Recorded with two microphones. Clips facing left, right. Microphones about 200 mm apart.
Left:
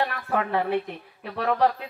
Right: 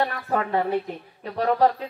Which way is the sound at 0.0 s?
40° right (ahead or behind).